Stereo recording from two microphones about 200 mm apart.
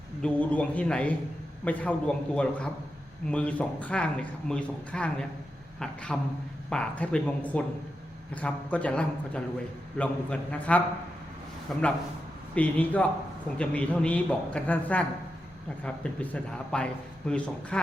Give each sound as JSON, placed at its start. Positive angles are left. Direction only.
{"t": 0.2, "sound": "a man's voice", "side_deg": 5}